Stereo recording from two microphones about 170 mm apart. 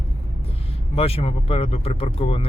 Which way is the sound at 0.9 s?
35° left (ahead or behind).